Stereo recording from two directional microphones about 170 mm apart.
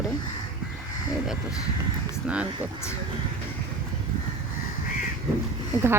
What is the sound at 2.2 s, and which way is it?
Speech, 5° right (ahead or behind).